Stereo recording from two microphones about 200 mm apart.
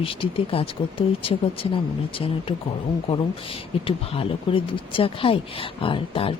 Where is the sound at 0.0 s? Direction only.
25° left (ahead or behind).